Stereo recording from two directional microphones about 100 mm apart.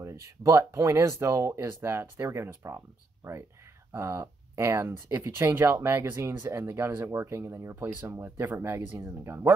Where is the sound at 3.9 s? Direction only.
30° right (ahead or behind).